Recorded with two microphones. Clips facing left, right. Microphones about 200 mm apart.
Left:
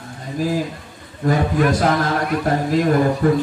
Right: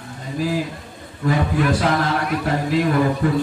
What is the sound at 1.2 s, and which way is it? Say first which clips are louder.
Speech: left 2 dB; 45° left (ahead or behind).